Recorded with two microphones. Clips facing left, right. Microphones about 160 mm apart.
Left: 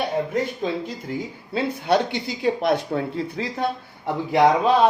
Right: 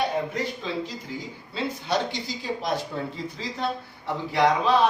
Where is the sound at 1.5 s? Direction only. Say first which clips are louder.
Left 6 dB; 60° left (ahead or behind).